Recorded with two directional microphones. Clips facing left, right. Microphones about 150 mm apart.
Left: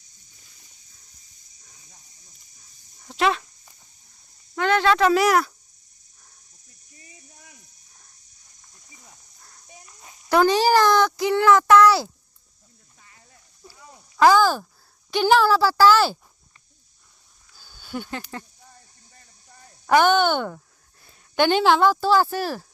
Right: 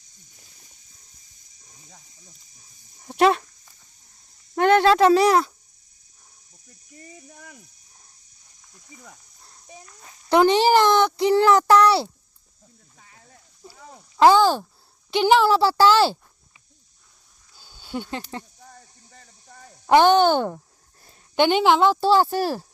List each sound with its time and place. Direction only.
3.2 s speech: 45° right (ahead or behind)
4.5 s a sound: 50° right (ahead or behind)
4.9 s a child's voice: 30° right (ahead or behind)
7.1 s speech: 60° right (ahead or behind)
9.4 s cricket: 25° right (ahead or behind)
9.8 s a child's voice: 10° left (ahead or behind)
10.2 s a child's voice: 25° right (ahead or behind)
13.9 s a sound: 30° right (ahead or behind)
15.1 s a child's voice: 20° right (ahead or behind)
17.5 s a sound: 25° right (ahead or behind)
19.9 s speech: 30° right (ahead or behind)
21.3 s a child's voice: 20° right (ahead or behind)